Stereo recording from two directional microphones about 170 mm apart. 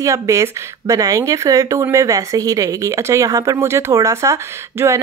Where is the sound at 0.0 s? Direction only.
20° right (ahead or behind).